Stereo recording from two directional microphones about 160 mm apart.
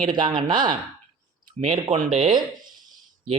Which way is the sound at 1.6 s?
45° right (ahead or behind).